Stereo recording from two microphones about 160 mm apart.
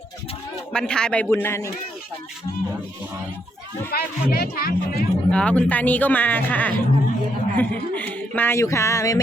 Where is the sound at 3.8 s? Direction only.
75° left (ahead or behind).